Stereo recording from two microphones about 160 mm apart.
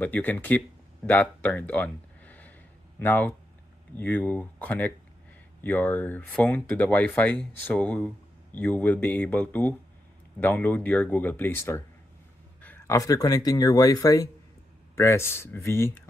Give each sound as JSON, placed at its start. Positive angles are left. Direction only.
{"t": 0.0, "sound": "speech", "side_deg": 10}